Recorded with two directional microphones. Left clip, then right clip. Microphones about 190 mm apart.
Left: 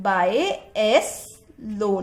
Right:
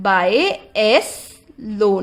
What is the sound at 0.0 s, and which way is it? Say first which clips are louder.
A woman's voice: right 5 dB; 35° right (ahead or behind).